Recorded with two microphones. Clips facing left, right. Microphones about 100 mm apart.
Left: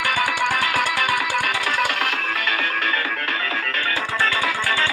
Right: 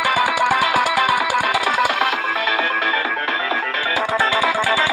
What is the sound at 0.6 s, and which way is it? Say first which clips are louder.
Music: right 5 dB; 15° right (ahead or behind).